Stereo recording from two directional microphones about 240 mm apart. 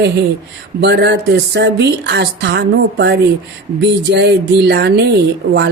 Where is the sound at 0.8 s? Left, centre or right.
Right.